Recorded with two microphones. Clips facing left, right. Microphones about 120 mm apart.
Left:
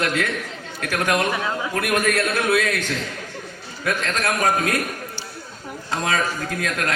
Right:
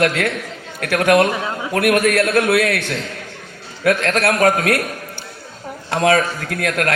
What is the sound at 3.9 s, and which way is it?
Speech, 65° right (ahead or behind).